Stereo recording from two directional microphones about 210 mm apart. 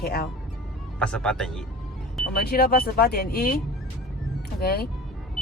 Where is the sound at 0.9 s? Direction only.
5° left (ahead or behind).